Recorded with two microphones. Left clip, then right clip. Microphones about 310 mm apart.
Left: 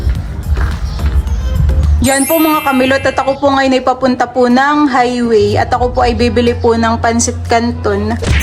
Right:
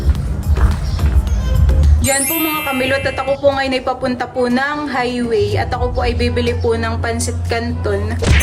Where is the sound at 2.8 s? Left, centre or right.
Centre.